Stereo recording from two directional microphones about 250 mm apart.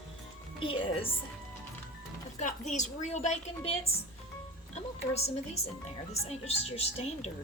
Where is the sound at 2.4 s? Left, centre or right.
Left.